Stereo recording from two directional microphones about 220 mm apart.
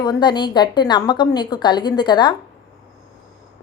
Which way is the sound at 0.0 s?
20° left (ahead or behind).